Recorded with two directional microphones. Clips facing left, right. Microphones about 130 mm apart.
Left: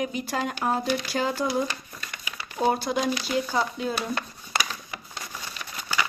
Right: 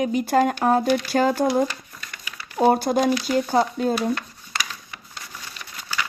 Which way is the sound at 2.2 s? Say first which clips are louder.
Left 1 dB; 20° left (ahead or behind).